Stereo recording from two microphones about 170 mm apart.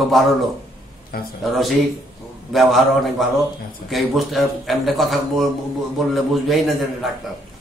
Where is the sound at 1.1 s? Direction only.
60° left (ahead or behind).